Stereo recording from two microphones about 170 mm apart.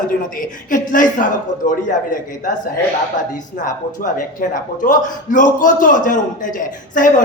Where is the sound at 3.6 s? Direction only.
50° left (ahead or behind).